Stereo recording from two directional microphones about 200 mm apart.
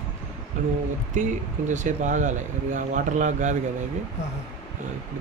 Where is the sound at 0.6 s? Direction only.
40° right (ahead or behind).